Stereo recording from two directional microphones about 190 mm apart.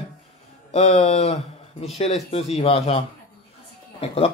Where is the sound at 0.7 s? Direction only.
35° left (ahead or behind).